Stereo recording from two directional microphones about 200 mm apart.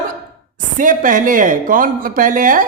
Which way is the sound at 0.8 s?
40° right (ahead or behind).